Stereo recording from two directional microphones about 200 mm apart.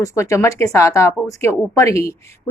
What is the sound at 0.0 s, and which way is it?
Speech, 15° left (ahead or behind).